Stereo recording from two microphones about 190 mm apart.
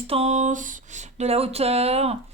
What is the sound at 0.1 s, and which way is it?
Speech, 35° right (ahead or behind).